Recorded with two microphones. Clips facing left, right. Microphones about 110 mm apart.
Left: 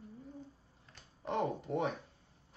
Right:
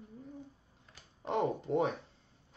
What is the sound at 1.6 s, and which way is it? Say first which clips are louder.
Speech: right 4 dB; 25° right (ahead or behind).